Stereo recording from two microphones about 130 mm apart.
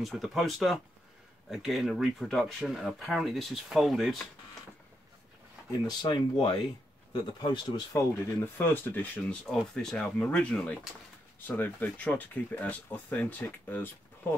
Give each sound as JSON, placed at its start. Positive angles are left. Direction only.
{"t": 0.0, "sound": "speech", "side_deg": 0}
{"t": 5.7, "sound": "speech", "side_deg": 35}